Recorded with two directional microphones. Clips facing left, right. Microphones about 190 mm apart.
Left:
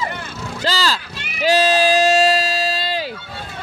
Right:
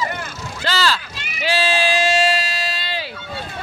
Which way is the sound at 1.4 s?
40° left (ahead or behind).